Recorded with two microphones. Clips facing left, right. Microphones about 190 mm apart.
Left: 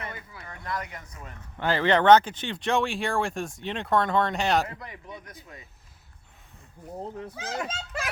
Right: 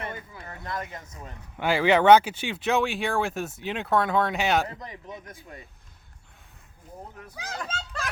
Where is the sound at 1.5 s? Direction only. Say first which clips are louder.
Right 2 dB; 10° right (ahead or behind).